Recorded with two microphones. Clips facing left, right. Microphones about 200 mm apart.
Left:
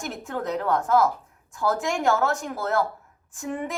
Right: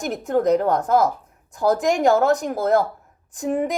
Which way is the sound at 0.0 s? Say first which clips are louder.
Right 10 dB; 40° right (ahead or behind).